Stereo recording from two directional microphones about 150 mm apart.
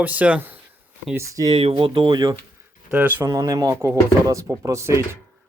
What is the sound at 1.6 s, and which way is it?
Speech, 40° right (ahead or behind).